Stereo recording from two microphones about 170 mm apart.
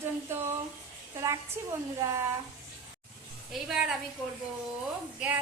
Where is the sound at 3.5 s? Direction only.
Centre (ahead or behind).